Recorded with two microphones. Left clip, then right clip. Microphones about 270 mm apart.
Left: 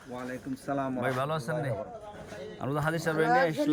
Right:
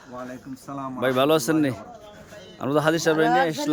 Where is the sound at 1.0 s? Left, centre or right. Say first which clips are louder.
Right 11 dB; right.